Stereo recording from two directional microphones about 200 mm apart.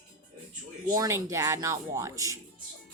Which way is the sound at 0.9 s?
15° right (ahead or behind).